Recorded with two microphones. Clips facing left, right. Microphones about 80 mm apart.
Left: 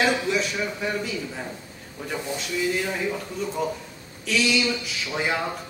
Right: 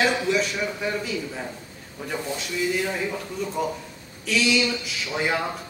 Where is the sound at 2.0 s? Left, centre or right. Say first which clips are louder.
Even; centre.